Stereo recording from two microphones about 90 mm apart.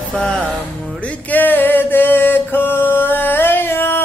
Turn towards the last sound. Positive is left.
turn(degrees=25)  # may be behind; listen again after turning